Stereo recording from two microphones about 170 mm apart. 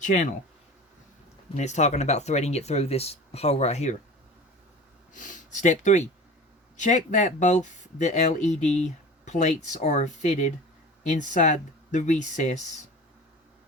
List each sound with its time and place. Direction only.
0.0 s speech: 45° left (ahead or behind)
1.5 s speech: 45° left (ahead or behind)
5.1 s speech: 50° left (ahead or behind)